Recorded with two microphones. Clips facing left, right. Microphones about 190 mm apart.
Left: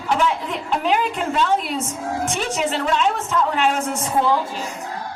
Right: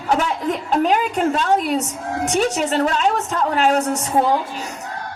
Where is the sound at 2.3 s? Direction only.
40° right (ahead or behind).